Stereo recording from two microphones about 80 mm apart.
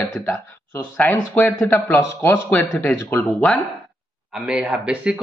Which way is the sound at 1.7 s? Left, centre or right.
Left.